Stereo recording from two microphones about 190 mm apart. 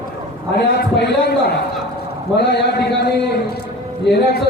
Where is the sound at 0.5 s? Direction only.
55° left (ahead or behind).